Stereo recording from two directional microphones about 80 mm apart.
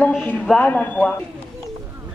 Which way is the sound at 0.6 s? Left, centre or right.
Left.